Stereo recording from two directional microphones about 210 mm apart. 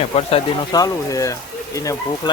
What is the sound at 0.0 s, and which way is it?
Speech, 30° left (ahead or behind).